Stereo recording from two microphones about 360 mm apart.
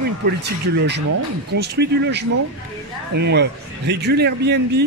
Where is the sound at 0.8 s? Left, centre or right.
Right.